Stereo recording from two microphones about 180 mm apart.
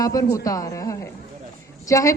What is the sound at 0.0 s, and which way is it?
A woman's voice, 20° left (ahead or behind).